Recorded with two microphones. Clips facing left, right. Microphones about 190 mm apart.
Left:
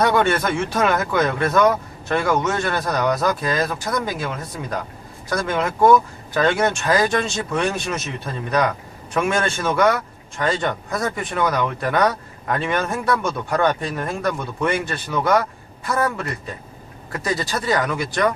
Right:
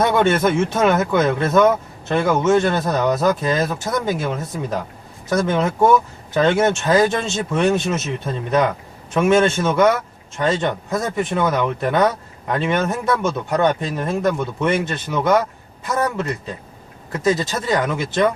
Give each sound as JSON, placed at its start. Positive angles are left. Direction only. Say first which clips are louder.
{"t": 0.0, "sound": "speech", "louder": "right 2 dB", "side_deg": -25}